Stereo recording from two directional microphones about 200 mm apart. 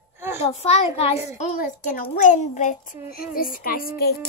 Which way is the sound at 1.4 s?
45° left (ahead or behind).